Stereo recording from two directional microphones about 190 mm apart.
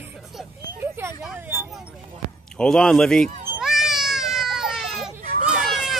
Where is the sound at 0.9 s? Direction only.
10° right (ahead or behind).